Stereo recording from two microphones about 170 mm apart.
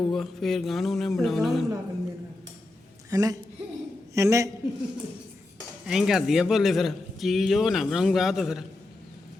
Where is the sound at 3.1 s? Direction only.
20° right (ahead or behind).